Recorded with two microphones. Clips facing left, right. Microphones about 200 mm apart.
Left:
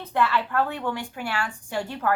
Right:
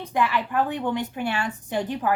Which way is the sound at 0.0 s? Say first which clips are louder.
Even; 15° right (ahead or behind).